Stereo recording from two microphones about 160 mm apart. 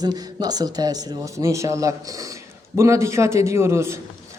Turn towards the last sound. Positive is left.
turn(degrees=-15)  # may be behind; listen again after turning